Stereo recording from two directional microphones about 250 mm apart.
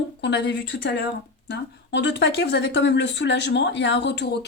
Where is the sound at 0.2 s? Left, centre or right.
Left.